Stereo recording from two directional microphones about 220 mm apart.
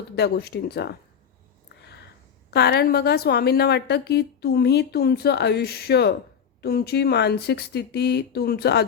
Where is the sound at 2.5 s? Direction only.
45° left (ahead or behind).